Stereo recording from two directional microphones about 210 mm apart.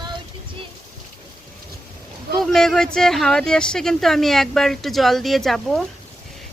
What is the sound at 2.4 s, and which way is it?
Speech, centre (ahead or behind).